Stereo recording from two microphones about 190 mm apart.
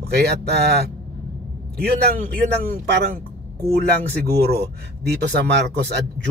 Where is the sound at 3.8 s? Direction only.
60° right (ahead or behind).